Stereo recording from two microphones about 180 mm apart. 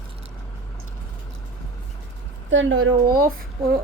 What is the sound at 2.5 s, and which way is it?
Speech, 90° right.